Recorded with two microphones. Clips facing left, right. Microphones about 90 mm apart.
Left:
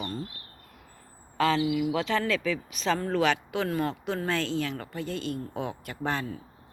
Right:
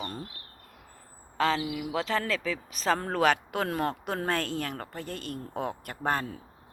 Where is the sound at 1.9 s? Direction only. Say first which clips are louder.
Left 2 dB; 35° right (ahead or behind).